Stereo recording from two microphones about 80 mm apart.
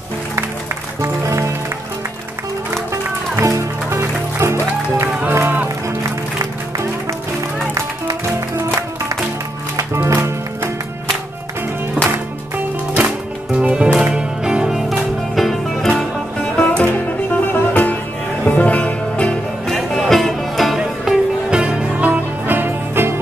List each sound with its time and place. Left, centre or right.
1.0 s music: right
2.9 s music: right
10.0 s music: right
13.5 s music: centre
19.7 s music: centre; by 23.1 s right